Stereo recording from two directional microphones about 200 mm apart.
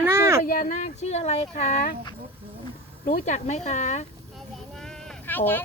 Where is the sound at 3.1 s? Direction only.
40° left (ahead or behind).